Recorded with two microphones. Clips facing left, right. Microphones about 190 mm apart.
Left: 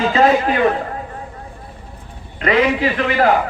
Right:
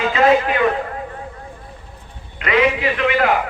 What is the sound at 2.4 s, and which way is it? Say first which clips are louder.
Speech: left 2 dB; 35° left (ahead or behind).